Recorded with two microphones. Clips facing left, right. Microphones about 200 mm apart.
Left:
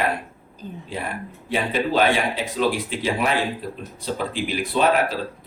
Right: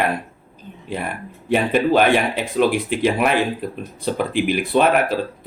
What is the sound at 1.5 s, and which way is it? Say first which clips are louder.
Speech: right 6 dB; 60° right (ahead or behind).